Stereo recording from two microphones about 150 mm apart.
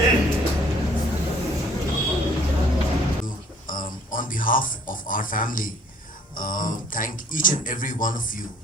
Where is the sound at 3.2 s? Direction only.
65° left (ahead or behind).